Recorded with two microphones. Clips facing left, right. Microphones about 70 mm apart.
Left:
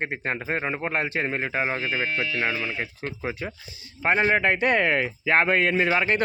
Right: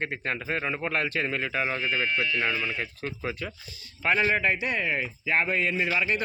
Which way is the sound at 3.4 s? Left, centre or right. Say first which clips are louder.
Left 3 dB; left.